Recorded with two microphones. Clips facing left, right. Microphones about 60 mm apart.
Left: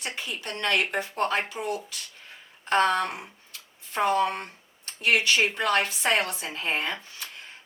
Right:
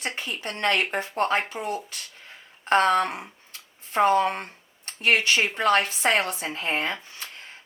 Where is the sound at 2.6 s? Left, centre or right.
Right.